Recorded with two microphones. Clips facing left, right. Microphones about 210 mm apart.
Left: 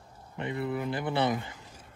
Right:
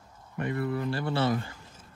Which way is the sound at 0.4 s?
20° left (ahead or behind).